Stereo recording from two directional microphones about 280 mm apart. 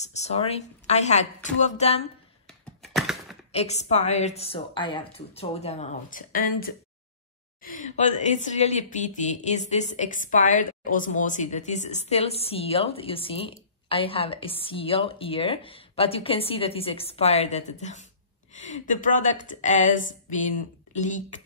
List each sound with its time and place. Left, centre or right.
0.0 s a woman's voice: left
2.4 s computer keyboard: centre
3.5 s a woman's voice: left